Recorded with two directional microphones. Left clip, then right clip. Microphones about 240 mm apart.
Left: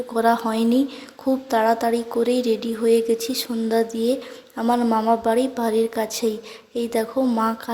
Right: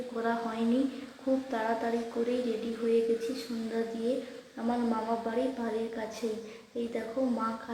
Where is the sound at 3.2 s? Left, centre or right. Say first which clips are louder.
Left 9 dB; left.